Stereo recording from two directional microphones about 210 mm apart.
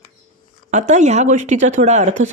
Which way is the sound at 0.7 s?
35° right (ahead or behind).